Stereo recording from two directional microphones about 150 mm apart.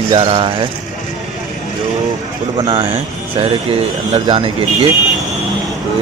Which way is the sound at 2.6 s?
35° right (ahead or behind).